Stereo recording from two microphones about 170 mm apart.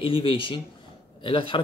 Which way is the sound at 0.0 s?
30° left (ahead or behind).